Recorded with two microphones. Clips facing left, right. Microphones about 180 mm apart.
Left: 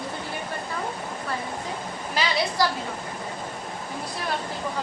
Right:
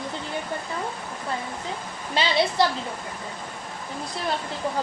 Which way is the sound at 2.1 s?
25° right (ahead or behind).